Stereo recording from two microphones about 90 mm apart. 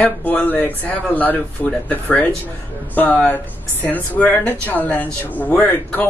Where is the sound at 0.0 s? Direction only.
15° left (ahead or behind).